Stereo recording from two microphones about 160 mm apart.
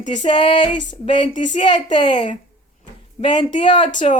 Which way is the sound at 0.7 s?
50° left (ahead or behind).